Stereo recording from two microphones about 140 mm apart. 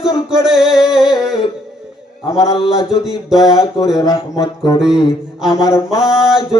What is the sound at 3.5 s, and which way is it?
Music, 25° left (ahead or behind).